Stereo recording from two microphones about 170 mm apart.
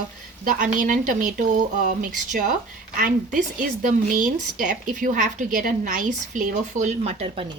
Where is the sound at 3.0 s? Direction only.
50° right (ahead or behind).